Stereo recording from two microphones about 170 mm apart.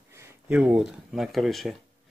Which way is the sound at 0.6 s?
5° right (ahead or behind).